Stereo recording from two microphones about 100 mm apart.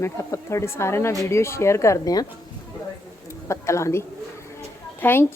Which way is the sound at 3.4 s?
30° left (ahead or behind).